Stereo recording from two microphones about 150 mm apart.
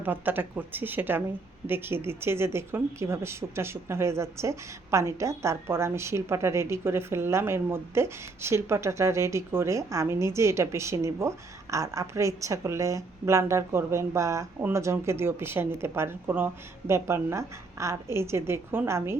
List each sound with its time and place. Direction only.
0.0 s speech: 15° right (ahead or behind)